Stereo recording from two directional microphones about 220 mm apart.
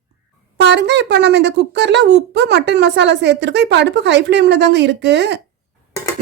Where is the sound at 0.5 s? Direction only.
50° right (ahead or behind).